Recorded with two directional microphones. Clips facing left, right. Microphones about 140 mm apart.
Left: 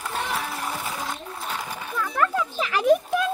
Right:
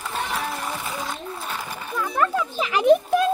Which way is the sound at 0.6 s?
5° left (ahead or behind).